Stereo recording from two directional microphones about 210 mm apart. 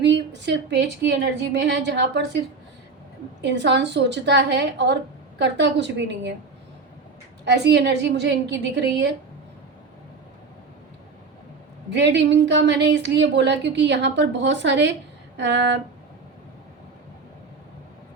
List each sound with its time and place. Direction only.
0.0 s a woman's voice: 55° right (ahead or behind)
3.4 s a woman's voice: 55° right (ahead or behind)
7.4 s a woman's voice: 55° right (ahead or behind)
11.9 s a woman's voice: 55° right (ahead or behind)